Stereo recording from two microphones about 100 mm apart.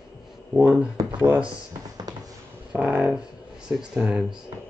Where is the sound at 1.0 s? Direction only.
30° right (ahead or behind).